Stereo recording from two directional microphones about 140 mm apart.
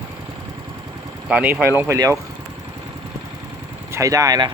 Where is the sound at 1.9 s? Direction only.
25° right (ahead or behind).